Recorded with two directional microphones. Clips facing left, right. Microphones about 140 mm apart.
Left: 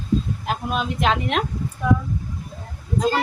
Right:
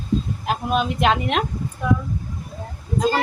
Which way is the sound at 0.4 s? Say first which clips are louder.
Right 3 dB; centre (ahead or behind).